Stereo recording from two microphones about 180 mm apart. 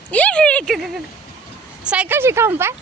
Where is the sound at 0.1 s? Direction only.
5° left (ahead or behind).